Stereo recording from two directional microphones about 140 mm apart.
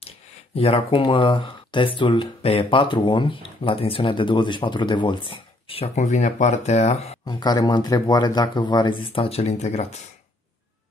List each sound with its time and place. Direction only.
0.6 s speech: 45° left (ahead or behind)
5.9 s speech: 55° left (ahead or behind)
7.2 s speech: 30° left (ahead or behind); by 10.0 s 50° left (ahead or behind)